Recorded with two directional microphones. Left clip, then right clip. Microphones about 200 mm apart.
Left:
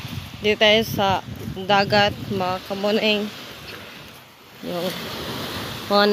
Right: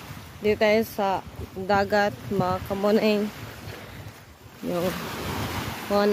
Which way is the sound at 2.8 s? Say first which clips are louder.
Left 2 dB; 20° right (ahead or behind).